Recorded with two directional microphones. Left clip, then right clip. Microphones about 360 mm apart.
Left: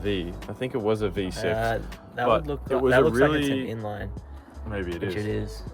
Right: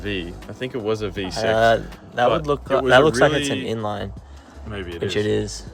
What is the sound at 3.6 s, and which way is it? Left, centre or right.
Speech, centre.